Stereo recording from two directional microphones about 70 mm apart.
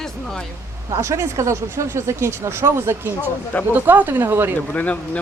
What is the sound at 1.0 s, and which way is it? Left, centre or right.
Speech, right.